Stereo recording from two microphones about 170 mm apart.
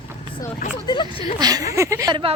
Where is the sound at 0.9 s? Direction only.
30° left (ahead or behind).